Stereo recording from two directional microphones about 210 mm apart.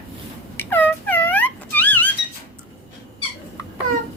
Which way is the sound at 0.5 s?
10° left (ahead or behind).